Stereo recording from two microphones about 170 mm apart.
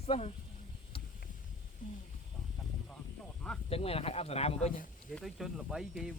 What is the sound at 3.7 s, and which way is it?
Speech, 35° left (ahead or behind).